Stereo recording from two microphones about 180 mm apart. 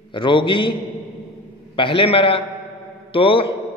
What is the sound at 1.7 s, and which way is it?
A man's voice, 30° left (ahead or behind).